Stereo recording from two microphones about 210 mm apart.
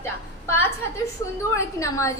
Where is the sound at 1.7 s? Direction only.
15° left (ahead or behind).